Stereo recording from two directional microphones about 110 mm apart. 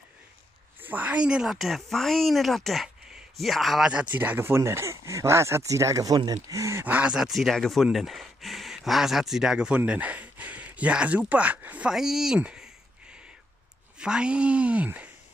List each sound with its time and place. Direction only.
0.7 s speech: 15° right (ahead or behind)
6.8 s speech: 15° right (ahead or behind)